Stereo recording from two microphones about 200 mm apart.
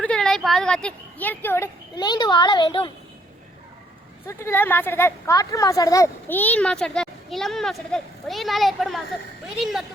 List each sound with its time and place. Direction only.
0.0 s speech: 5° left (ahead or behind); by 2.9 s 20° left (ahead or behind)
4.3 s speech: 15° left (ahead or behind)